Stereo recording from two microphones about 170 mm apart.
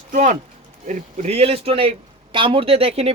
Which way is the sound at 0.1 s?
50° right (ahead or behind).